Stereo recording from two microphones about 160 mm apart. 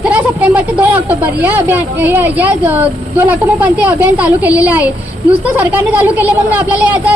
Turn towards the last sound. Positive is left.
turn(degrees=-10)  # may be behind; listen again after turning